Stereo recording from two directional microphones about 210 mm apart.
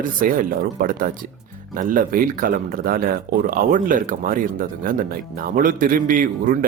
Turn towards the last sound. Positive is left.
turn(degrees=-40)  # may be behind; listen again after turning